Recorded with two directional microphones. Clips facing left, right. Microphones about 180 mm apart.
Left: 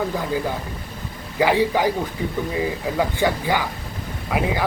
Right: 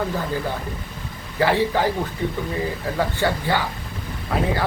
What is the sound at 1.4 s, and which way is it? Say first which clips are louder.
Speech: left 1 dB; 15° left (ahead or behind).